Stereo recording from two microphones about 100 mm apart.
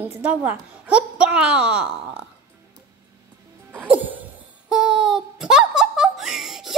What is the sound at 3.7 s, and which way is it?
Music, 15° right (ahead or behind).